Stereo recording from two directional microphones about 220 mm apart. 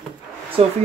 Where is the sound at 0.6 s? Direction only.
25° right (ahead or behind).